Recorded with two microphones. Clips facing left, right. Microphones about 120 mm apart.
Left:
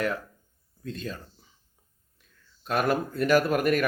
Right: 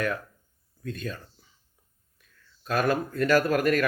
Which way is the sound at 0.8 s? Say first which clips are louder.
Right 1 dB; 25° left (ahead or behind).